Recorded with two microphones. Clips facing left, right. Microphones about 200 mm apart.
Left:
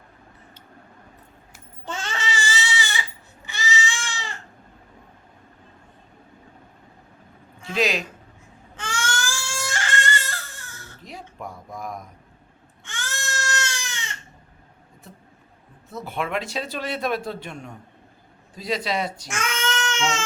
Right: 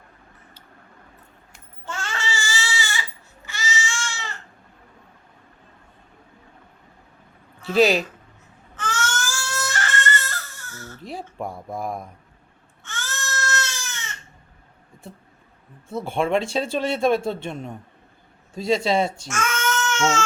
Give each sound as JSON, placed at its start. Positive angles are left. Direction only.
{"t": 1.8, "sound": "baby cry", "side_deg": 20}
{"t": 3.4, "sound": "goat", "side_deg": 15}
{"t": 7.7, "sound": "speech", "side_deg": -35}
{"t": 8.7, "sound": "baby cry", "side_deg": 10}
{"t": 11.0, "sound": "speech", "side_deg": -30}
{"t": 12.8, "sound": "goat", "side_deg": 15}
{"t": 15.9, "sound": "a man's voice", "side_deg": -30}
{"t": 19.3, "sound": "babbling", "side_deg": 15}